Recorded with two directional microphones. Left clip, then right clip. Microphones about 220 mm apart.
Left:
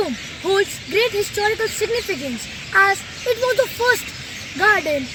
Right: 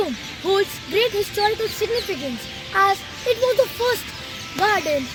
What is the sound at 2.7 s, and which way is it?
Speech, 5° left (ahead or behind).